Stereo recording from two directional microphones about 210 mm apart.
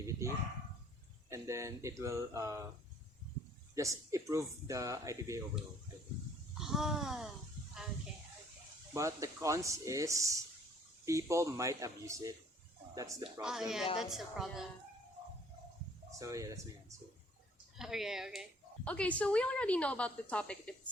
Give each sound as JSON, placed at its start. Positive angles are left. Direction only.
{"t": 0.0, "sound": "bow-wow", "side_deg": -15}
{"t": 1.3, "sound": "speech", "side_deg": -15}
{"t": 3.8, "sound": "speech", "side_deg": -15}
{"t": 6.6, "sound": "a woman's voice", "side_deg": 0}
{"t": 8.9, "sound": "speech", "side_deg": -15}
{"t": 13.4, "sound": "a woman's voice", "side_deg": 0}
{"t": 16.1, "sound": "speech", "side_deg": -15}
{"t": 17.7, "sound": "a woman's voice", "side_deg": 0}